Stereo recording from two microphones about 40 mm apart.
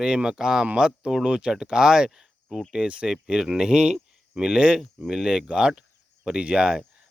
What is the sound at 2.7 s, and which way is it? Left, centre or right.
Speech, right.